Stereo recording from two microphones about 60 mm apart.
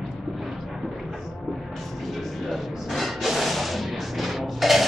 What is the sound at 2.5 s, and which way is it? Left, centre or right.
Music, centre.